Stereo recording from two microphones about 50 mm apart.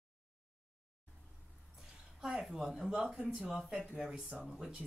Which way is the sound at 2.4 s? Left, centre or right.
Centre.